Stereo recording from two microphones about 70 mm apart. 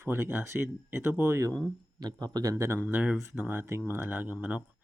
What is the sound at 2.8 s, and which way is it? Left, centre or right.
Speech, right.